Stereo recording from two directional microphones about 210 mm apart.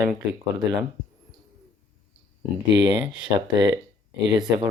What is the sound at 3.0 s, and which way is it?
Speech, 15° right (ahead or behind).